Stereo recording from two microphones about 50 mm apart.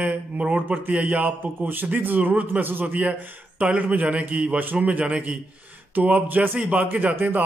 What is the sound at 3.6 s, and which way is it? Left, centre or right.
Speech, right.